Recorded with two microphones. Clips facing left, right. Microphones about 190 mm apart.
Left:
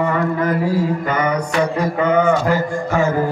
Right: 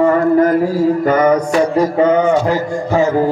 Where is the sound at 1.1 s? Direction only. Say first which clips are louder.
Right 7 dB; 40° right (ahead or behind).